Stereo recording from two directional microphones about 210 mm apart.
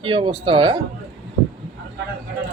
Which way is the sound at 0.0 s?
25° right (ahead or behind).